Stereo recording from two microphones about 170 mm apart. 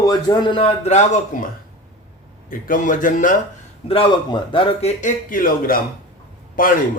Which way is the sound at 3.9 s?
30° left (ahead or behind).